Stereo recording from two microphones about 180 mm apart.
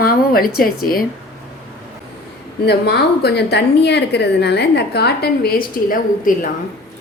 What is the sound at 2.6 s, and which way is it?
A woman's voice, 65° left (ahead or behind).